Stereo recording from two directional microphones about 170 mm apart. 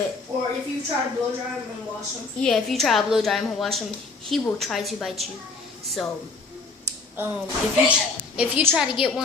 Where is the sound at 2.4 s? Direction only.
5° left (ahead or behind).